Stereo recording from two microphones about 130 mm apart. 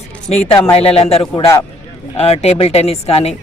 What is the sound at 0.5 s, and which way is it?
A man's voice, 45° left (ahead or behind).